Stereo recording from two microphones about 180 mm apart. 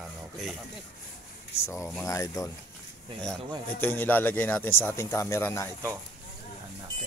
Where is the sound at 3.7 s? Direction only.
10° left (ahead or behind).